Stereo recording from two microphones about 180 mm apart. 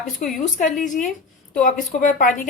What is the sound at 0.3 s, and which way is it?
A woman's voice, 45° left (ahead or behind).